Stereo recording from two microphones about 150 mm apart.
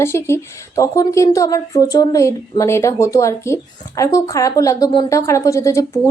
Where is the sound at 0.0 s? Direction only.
15° left (ahead or behind).